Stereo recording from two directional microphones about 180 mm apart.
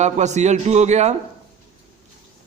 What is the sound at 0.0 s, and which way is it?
A man's voice, 40° right (ahead or behind).